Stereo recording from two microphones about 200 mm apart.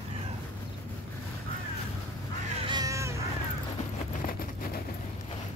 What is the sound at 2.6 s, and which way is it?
Cat, 20° right (ahead or behind).